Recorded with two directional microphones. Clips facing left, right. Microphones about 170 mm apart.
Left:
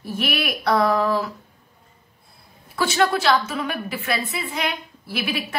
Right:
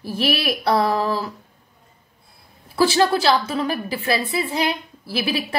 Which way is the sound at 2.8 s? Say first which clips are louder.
Right 3 dB; 30° right (ahead or behind).